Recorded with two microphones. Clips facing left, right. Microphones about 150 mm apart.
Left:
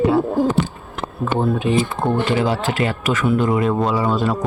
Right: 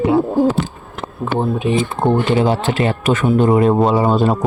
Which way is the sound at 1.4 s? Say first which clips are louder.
Right 1 dB; 20° right (ahead or behind).